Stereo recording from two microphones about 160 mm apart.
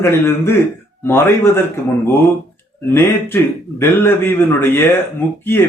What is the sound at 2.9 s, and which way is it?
Speech, 15° left (ahead or behind).